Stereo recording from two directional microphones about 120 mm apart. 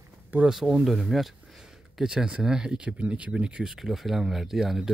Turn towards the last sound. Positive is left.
turn(degrees=-5)  # may be behind; listen again after turning